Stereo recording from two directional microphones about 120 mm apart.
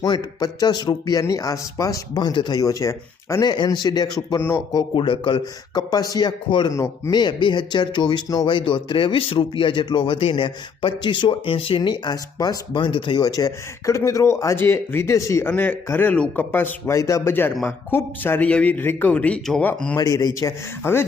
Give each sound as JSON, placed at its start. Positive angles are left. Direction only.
{"t": 0.0, "sound": "speech", "side_deg": 30}
{"t": 3.4, "sound": "speech", "side_deg": 35}
{"t": 4.4, "sound": "speech", "side_deg": 20}
{"t": 4.9, "sound": "speech", "side_deg": 45}
{"t": 6.7, "sound": "speech", "side_deg": 25}
{"t": 7.1, "sound": "speech", "side_deg": 40}
{"t": 11.8, "sound": "speech", "side_deg": 35}
{"t": 20.0, "sound": "speech", "side_deg": 30}